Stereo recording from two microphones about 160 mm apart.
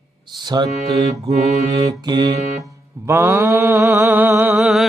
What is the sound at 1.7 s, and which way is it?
Mantra, 25° right (ahead or behind).